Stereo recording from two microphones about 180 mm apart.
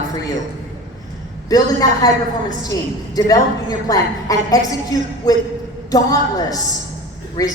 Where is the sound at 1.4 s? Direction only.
20° left (ahead or behind).